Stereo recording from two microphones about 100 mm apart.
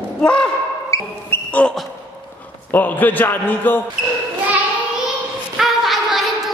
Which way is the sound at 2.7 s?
20° left (ahead or behind).